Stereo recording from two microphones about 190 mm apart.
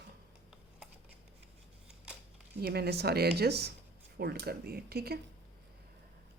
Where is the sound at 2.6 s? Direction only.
55° right (ahead or behind).